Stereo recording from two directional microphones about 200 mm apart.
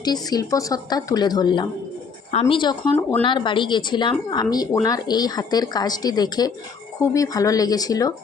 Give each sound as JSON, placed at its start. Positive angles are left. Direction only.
{"t": 0.0, "sound": "a woman's voice", "side_deg": 20}